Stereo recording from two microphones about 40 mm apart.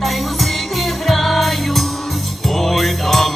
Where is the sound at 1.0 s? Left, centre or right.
Centre.